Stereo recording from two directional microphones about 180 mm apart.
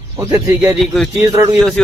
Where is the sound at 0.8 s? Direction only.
Centre (ahead or behind).